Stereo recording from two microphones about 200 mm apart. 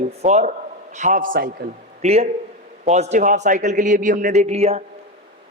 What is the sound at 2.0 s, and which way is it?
A man's voice, 35° right (ahead or behind).